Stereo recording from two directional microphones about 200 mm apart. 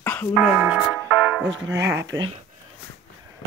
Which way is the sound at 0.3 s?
5° right (ahead or behind).